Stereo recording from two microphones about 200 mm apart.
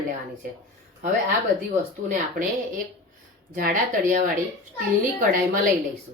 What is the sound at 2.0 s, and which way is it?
Speech, 40° right (ahead or behind).